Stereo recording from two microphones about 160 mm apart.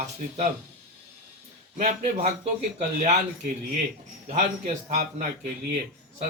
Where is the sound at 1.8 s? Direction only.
45° right (ahead or behind).